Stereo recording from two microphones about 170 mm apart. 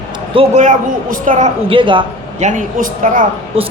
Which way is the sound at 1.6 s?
30° right (ahead or behind).